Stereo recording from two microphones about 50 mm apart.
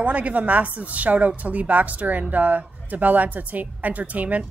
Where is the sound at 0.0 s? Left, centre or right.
Right.